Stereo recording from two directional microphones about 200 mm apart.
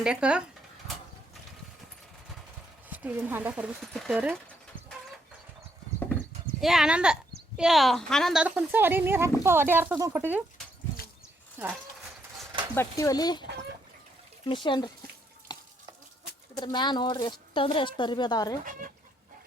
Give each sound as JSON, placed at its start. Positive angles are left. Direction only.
{"t": 0.0, "sound": "speech", "side_deg": -5}
{"t": 2.9, "sound": "speech", "side_deg": -10}
{"t": 6.6, "sound": "speech", "side_deg": 0}
{"t": 11.6, "sound": "speech", "side_deg": -10}
{"t": 12.7, "sound": "a woman's voice", "side_deg": 15}
{"t": 15.5, "sound": "water tap", "side_deg": 20}
{"t": 16.6, "sound": "a woman's voice", "side_deg": 20}
{"t": 18.6, "sound": "speech", "side_deg": -45}